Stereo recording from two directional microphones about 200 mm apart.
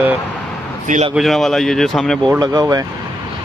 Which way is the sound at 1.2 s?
Centre (ahead or behind).